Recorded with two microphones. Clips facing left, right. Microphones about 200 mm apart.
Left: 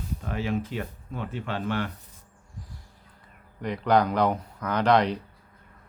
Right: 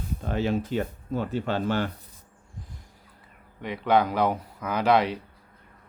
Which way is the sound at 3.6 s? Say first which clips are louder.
Even; 5° right (ahead or behind).